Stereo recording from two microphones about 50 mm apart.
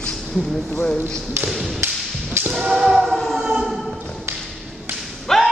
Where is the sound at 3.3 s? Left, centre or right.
Centre.